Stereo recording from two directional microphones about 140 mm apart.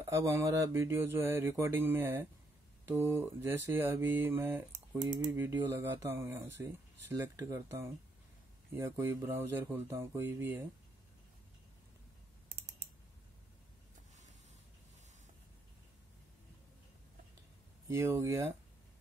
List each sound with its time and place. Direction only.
0.0 s mantra: 20° right (ahead or behind)
17.8 s speech: 20° right (ahead or behind)